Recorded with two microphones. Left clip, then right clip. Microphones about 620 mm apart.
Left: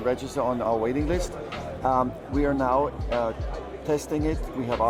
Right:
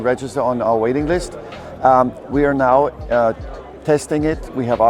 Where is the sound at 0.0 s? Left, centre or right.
Right.